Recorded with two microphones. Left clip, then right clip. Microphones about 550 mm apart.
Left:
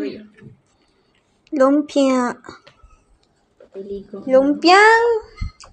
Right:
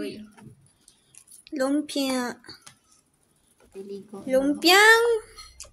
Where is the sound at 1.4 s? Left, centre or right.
Right.